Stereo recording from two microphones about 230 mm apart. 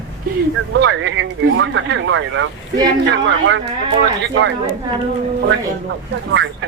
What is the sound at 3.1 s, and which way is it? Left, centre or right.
Speech, right.